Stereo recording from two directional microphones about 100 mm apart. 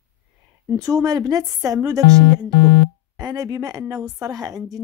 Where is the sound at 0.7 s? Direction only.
35° right (ahead or behind).